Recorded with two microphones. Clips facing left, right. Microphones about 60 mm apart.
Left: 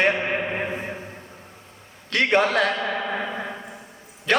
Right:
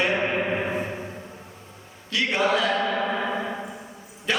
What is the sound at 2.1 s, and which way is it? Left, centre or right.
Speech, left.